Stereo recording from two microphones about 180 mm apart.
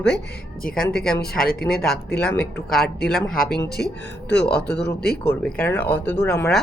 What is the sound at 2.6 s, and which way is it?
Speech, 60° left (ahead or behind).